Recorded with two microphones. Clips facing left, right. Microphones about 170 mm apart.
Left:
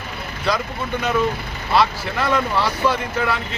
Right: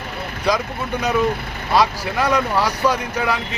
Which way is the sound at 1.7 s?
15° right (ahead or behind).